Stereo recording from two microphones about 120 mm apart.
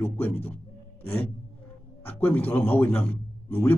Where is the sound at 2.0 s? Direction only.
15° left (ahead or behind).